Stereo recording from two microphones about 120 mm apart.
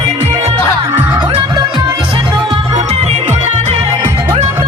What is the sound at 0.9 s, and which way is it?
Music, 15° right (ahead or behind).